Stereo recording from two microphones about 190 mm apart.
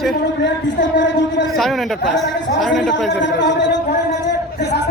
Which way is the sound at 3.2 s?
70° left (ahead or behind).